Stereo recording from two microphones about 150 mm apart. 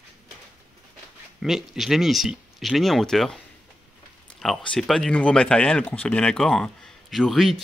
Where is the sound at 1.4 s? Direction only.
Centre (ahead or behind).